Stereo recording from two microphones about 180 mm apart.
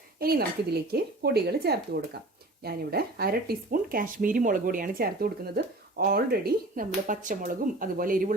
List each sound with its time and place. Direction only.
0.2 s speech: 60° right (ahead or behind)